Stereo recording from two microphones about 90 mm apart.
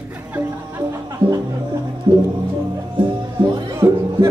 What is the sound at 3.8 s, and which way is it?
Music, 30° right (ahead or behind).